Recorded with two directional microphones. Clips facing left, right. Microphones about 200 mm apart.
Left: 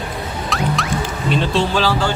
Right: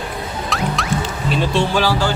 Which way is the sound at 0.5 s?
Centre (ahead or behind).